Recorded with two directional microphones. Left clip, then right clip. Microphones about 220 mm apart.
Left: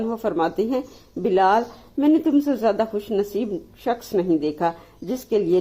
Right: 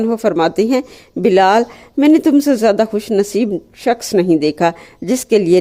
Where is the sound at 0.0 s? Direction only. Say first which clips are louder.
Right 8 dB; 45° right (ahead or behind).